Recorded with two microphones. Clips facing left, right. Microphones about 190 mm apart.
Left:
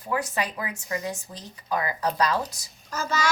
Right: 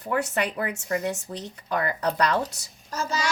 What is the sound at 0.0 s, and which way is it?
Speech, 70° right (ahead or behind).